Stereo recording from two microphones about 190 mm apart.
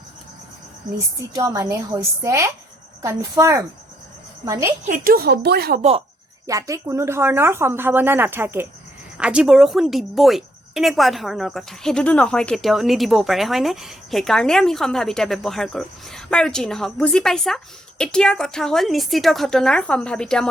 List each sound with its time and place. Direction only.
0.9 s speech: 15° right (ahead or behind)
4.9 s speech: 50° right (ahead or behind)
6.5 s a woman's voice: 15° right (ahead or behind); by 20.5 s 5° left (ahead or behind)